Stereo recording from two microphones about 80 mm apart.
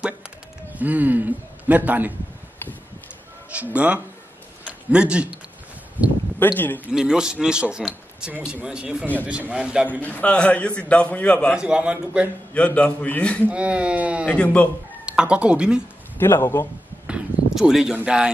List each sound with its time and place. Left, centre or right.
0.7 s a man's voice: right
3.5 s a man's voice: centre
6.4 s a man's voice: left
6.9 s a man's voice: centre
9.8 s a man's voice: left
11.5 s a man's voice: centre
12.5 s a man's voice: centre
13.5 s a man's voice: centre
14.2 s a man's voice: centre
15.0 s speech: centre
16.2 s a man's voice: left
17.6 s a man's voice: centre